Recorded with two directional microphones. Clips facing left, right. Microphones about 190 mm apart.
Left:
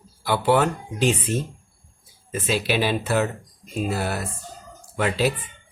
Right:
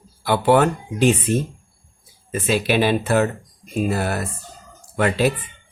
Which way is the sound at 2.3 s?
55° right (ahead or behind).